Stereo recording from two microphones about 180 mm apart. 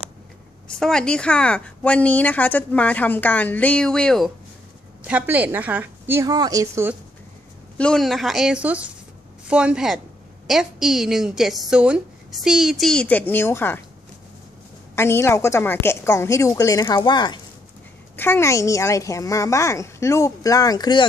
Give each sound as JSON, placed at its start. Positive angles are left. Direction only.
{"t": 0.7, "sound": "speech", "side_deg": 5}
{"t": 5.0, "sound": "a woman's voice", "side_deg": -10}
{"t": 7.7, "sound": "a woman's voice", "side_deg": 5}
{"t": 15.0, "sound": "speech", "side_deg": 15}
{"t": 18.1, "sound": "speech", "side_deg": 10}